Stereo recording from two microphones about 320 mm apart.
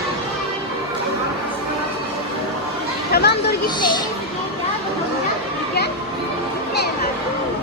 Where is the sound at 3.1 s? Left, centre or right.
Left.